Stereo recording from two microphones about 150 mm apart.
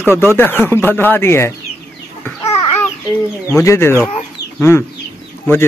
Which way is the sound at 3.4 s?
20° left (ahead or behind).